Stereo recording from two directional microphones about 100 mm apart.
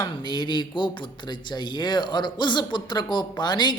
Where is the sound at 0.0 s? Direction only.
50° left (ahead or behind).